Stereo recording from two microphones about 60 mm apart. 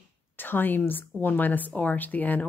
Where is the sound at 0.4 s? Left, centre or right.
Left.